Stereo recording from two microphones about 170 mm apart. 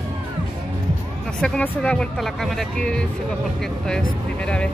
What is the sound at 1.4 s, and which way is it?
Speech, 5° left (ahead or behind).